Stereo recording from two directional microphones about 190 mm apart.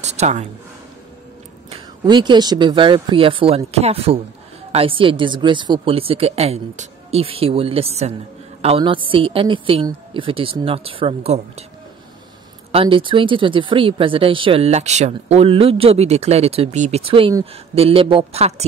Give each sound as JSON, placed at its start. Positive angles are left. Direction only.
{"t": 0.0, "sound": "speech", "side_deg": -35}
{"t": 1.7, "sound": "a woman's voice", "side_deg": -25}
{"t": 12.7, "sound": "a woman's voice", "side_deg": -30}